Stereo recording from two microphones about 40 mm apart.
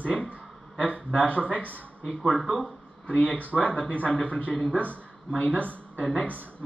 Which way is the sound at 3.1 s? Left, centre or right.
Left.